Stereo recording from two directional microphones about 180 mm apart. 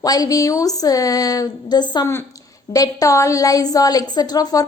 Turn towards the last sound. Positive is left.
turn(degrees=20)  # may be behind; listen again after turning